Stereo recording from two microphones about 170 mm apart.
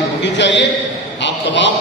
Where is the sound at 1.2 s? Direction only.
90° left.